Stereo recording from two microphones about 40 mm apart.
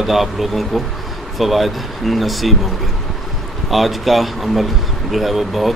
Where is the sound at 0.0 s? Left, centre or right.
Centre.